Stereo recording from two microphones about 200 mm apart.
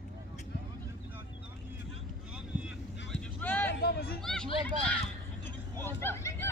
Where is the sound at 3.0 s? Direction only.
10° left (ahead or behind).